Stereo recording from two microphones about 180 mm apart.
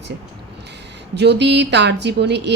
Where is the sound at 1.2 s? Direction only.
70° right (ahead or behind).